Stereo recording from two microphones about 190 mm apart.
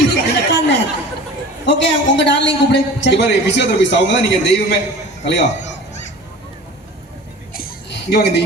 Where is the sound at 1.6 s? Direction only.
65° left (ahead or behind).